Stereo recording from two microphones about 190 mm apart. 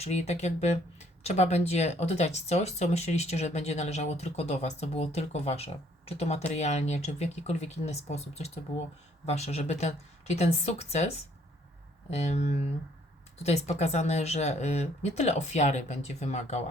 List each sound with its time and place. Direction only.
0.0 s speech: 35° left (ahead or behind)
12.1 s speech: 35° left (ahead or behind)